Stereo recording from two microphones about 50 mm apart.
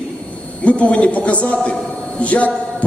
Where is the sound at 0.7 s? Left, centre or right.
Left.